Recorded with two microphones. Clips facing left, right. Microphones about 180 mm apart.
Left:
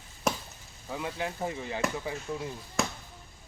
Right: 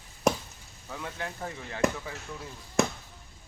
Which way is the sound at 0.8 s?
15° left (ahead or behind).